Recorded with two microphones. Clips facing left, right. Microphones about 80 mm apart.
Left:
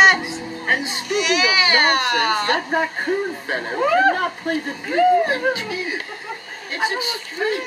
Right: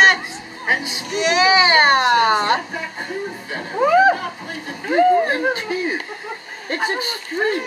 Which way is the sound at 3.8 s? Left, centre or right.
Centre.